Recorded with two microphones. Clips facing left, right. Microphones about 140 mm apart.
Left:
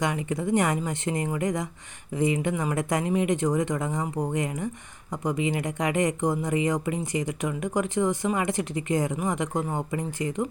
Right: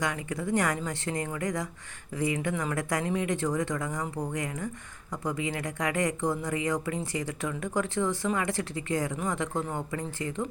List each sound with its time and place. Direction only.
0.0 s speech: 20° left (ahead or behind)